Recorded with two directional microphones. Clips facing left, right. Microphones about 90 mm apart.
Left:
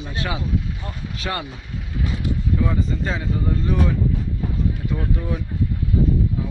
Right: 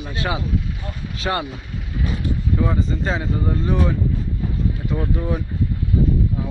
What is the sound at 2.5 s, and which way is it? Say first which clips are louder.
Speech: right 2 dB; 25° right (ahead or behind).